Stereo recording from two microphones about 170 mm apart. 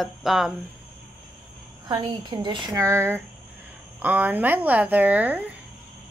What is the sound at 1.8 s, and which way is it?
Speech, 25° right (ahead or behind).